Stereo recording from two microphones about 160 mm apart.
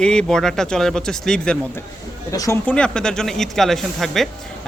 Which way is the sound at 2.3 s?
20° left (ahead or behind).